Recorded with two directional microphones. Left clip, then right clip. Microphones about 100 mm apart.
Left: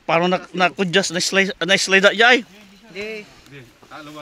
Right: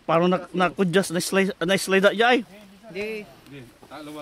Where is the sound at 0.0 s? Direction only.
25° right (ahead or behind).